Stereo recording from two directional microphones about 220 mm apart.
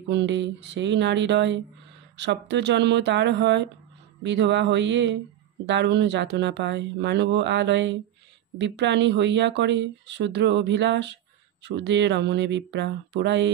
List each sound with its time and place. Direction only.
0.1 s speech: 55° right (ahead or behind)